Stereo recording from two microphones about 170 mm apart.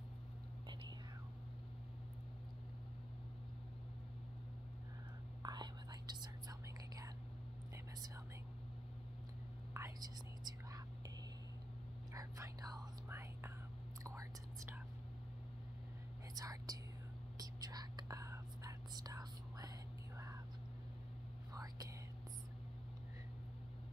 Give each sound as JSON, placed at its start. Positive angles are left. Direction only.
{"t": 5.4, "sound": "whispering", "side_deg": -25}
{"t": 9.8, "sound": "whispering", "side_deg": -20}
{"t": 12.1, "sound": "whispering", "side_deg": -20}
{"t": 16.3, "sound": "speech", "side_deg": -20}
{"t": 17.4, "sound": "whispering", "side_deg": -20}
{"t": 21.5, "sound": "whispering", "side_deg": -20}